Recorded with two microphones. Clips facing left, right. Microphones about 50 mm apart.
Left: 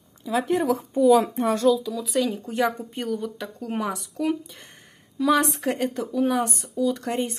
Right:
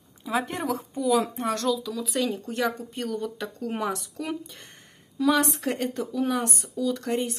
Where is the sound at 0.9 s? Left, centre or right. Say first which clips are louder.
Left 7 dB; centre.